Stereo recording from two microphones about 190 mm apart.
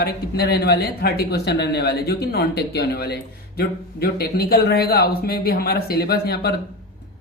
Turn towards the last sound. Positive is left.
turn(degrees=55)  # may be behind; listen again after turning